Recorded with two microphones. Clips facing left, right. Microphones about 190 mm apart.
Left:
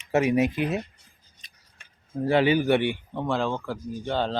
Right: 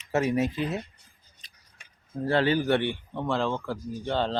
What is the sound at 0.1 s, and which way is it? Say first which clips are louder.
Speech: left 3 dB; 15° left (ahead or behind).